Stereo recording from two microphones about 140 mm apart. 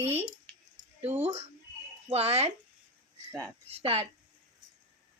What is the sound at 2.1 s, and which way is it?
Speech, 45° right (ahead or behind).